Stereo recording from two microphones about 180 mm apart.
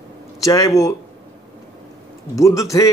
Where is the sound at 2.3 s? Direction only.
20° left (ahead or behind).